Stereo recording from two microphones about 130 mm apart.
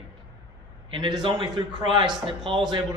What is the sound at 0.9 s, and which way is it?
A man's voice, 40° right (ahead or behind).